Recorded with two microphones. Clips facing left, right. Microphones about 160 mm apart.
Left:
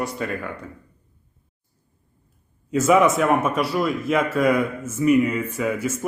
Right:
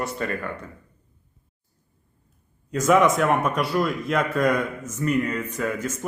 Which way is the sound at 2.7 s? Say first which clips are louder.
Left 2 dB; 5° left (ahead or behind).